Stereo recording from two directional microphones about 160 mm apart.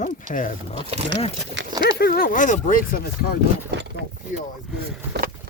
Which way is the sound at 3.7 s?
90° right.